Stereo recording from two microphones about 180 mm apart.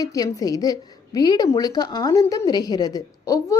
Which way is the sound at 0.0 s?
20° left (ahead or behind).